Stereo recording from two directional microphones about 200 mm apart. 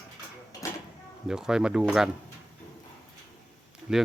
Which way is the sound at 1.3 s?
5° right (ahead or behind).